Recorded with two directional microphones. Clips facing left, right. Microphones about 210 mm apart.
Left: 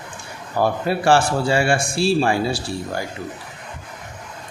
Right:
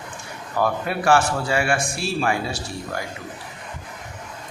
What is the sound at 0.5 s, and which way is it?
A man's voice, 30° left (ahead or behind).